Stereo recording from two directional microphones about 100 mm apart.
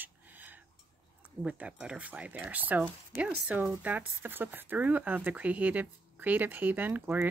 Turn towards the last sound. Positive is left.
turn(degrees=-15)  # may be behind; listen again after turning